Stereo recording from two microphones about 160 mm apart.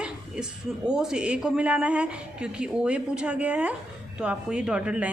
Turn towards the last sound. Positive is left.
turn(degrees=-5)  # may be behind; listen again after turning